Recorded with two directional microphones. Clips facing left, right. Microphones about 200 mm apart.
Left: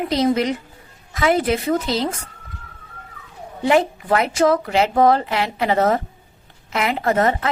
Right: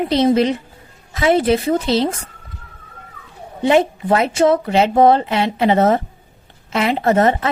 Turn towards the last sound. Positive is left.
turn(degrees=-25)  # may be behind; listen again after turning